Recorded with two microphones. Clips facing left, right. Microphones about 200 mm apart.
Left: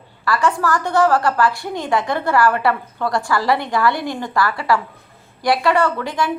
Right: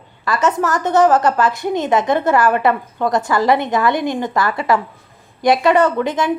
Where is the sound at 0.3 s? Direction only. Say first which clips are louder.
Right 1 dB; 20° right (ahead or behind).